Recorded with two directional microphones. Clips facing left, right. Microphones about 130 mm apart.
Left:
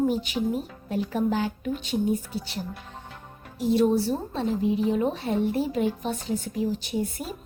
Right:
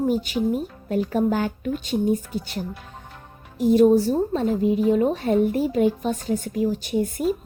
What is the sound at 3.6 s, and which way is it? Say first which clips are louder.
Speech: right 6 dB; 50° right (ahead or behind).